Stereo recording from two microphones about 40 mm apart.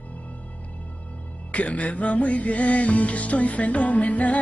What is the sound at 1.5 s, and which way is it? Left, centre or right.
Music, left.